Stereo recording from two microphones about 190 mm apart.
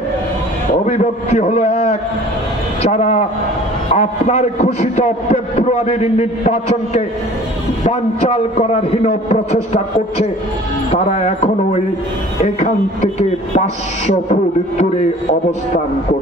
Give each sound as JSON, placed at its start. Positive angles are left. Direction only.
{"t": 0.8, "sound": "a man's voice", "side_deg": 35}